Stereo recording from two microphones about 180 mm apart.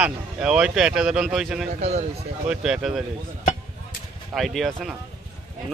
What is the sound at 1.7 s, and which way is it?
Speech, 40° right (ahead or behind).